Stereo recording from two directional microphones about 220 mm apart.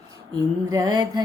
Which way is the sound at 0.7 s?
15° right (ahead or behind).